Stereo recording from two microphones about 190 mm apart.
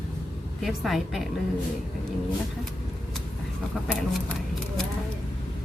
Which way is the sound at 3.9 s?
5° left (ahead or behind).